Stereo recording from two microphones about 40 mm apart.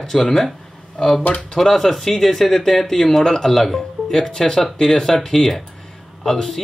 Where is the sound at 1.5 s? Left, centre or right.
Centre.